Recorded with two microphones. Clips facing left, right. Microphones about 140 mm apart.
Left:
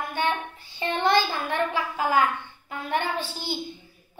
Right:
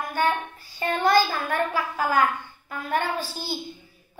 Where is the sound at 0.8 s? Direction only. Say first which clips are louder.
Right 1 dB; 20° left (ahead or behind).